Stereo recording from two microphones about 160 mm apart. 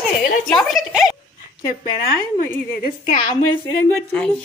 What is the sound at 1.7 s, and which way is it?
Speech, 65° left (ahead or behind).